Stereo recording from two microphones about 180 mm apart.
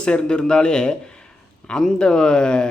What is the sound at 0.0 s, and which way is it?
A man's voice, 5° left (ahead or behind).